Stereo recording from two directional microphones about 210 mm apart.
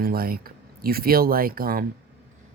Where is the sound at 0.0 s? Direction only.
45° right (ahead or behind).